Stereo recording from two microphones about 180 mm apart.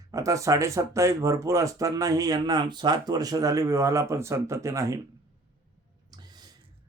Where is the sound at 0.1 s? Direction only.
20° right (ahead or behind).